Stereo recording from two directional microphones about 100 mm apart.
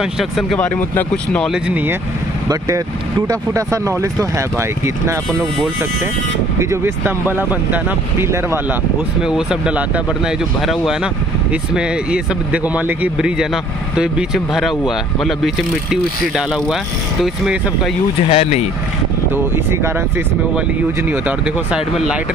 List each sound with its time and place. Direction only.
0.0 s speech: centre (ahead or behind)
0.6 s speech: 15° left (ahead or behind)
1.5 s speech: 15° right (ahead or behind)
3.3 s speech: 30° right (ahead or behind)
6.6 s speech: 25° right (ahead or behind)
9.2 s speech: 10° right (ahead or behind)
10.6 s speech: centre (ahead or behind)
18.3 s speech: 90° left
19.3 s speech: 25° right (ahead or behind)
21.1 s speech: 10° right (ahead or behind)